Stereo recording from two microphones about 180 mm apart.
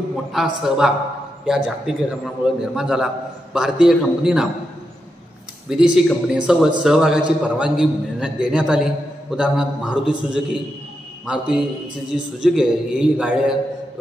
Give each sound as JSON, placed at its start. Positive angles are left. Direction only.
{"t": 0.1, "sound": "a man's voice", "side_deg": 0}
{"t": 5.7, "sound": "a man's voice", "side_deg": -5}